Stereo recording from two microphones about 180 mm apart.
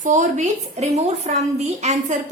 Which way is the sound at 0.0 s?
45° right (ahead or behind).